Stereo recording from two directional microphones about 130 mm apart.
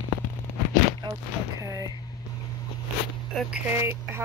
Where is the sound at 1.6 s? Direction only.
25° right (ahead or behind).